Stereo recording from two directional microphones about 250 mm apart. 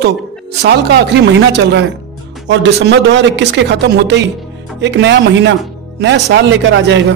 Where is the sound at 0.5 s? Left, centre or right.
Right.